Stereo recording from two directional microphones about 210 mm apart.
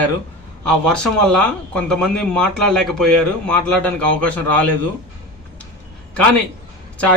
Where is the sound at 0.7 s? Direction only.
5° left (ahead or behind).